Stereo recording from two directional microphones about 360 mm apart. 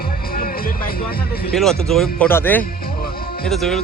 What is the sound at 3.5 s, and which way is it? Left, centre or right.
Speech, centre.